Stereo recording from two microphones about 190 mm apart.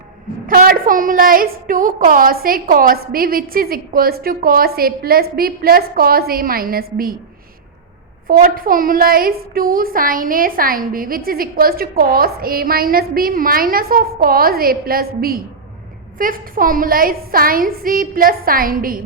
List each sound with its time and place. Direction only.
0.4 s a woman's voice: 50° right (ahead or behind)
8.3 s a woman's voice: 50° right (ahead or behind)